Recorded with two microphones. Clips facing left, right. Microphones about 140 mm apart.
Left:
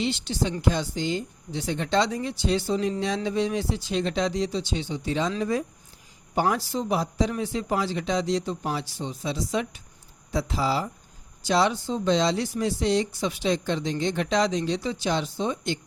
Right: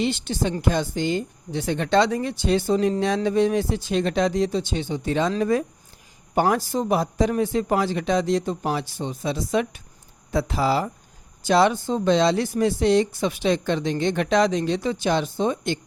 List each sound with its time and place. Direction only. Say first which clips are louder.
0.0 s a man's voice: right 3 dB; 55° right (ahead or behind)